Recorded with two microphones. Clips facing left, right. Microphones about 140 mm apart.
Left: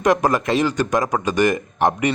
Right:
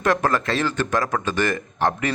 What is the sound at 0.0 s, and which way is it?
A man's voice, 15° left (ahead or behind).